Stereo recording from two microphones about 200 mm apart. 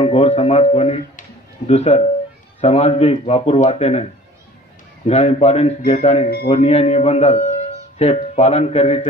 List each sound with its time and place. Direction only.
0.0 s speech: 30° left (ahead or behind)